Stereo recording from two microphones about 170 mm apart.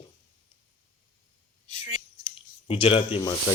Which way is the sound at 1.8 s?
35° left (ahead or behind).